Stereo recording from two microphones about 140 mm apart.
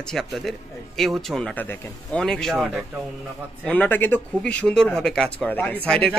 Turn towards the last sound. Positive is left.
turn(degrees=10)  # may be behind; listen again after turning